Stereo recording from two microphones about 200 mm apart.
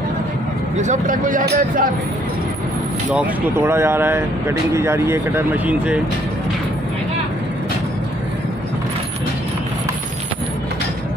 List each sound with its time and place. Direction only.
0.7 s speech: 40° right (ahead or behind)
3.1 s speech: 10° right (ahead or behind)